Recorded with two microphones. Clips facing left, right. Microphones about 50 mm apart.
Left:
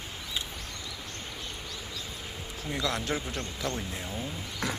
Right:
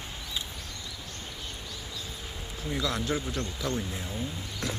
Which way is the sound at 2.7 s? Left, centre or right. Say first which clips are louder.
Right 1 dB; left.